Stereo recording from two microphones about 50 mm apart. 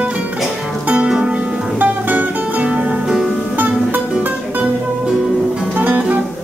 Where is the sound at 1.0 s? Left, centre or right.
Centre.